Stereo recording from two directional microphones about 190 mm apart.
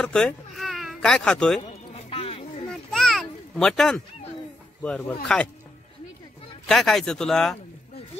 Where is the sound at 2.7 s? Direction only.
Centre (ahead or behind).